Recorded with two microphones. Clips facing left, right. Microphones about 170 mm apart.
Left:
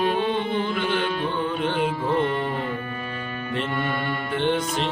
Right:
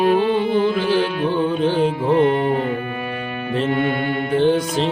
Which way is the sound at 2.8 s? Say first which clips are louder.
Right 6 dB; 65° right (ahead or behind).